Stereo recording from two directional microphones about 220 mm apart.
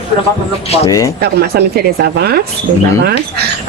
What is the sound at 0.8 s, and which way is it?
Speech, 15° left (ahead or behind).